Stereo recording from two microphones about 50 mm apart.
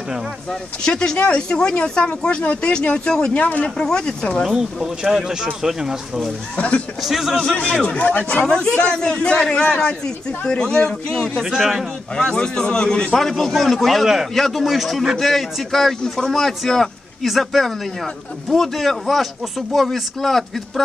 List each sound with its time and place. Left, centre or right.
0.5 s speech: centre
3.3 s speech: left
3.6 s a man's voice: centre
4.4 s speech: centre
6.5 s speech: left
7.0 s a man's voice: centre
7.5 s a man's voice: centre
7.8 s a man's voice: left; by 20.8 s centre